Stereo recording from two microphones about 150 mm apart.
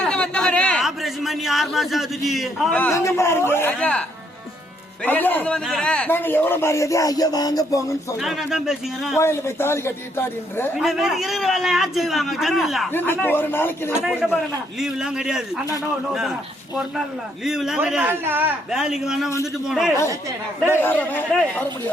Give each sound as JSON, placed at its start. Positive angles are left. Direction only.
{"t": 0.0, "sound": "a sound", "side_deg": 5}
{"t": 2.9, "sound": "a man's voice", "side_deg": 20}
{"t": 5.0, "sound": "a man's voice", "side_deg": 10}
{"t": 8.2, "sound": "a man's voice", "side_deg": 0}
{"t": 9.1, "sound": "a man's voice", "side_deg": 15}
{"t": 10.8, "sound": "a man's voice", "side_deg": -5}
{"t": 12.9, "sound": "a man's voice", "side_deg": 15}
{"t": 14.0, "sound": "a man's voice", "side_deg": -5}
{"t": 20.7, "sound": "a man's voice", "side_deg": 15}